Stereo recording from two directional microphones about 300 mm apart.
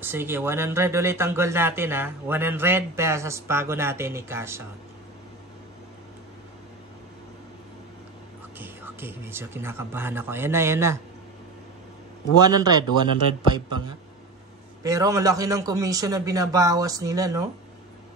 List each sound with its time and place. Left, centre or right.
0.0 s speech: centre
8.5 s speech: centre
12.4 s speech: centre